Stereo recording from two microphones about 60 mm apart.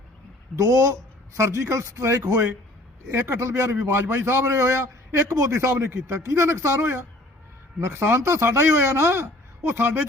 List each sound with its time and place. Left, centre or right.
0.5 s a man's voice: right
2.3 s a man's voice: right
5.5 s a man's voice: right